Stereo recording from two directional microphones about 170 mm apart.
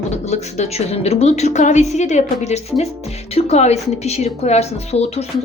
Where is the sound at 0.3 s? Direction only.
40° left (ahead or behind).